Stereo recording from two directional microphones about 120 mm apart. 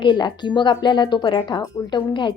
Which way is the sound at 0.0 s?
40° left (ahead or behind).